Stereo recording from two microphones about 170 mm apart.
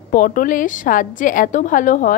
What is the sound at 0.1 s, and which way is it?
A woman's voice, 55° left (ahead or behind).